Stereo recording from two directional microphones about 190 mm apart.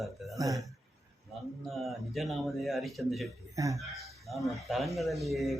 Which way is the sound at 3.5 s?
15° right (ahead or behind).